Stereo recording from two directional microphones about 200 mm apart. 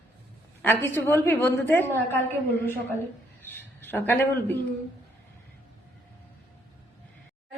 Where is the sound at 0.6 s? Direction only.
10° left (ahead or behind).